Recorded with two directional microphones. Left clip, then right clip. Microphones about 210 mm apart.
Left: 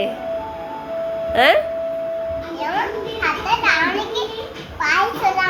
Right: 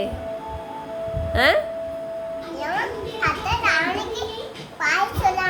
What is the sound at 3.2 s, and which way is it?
Children playing, 20° right (ahead or behind).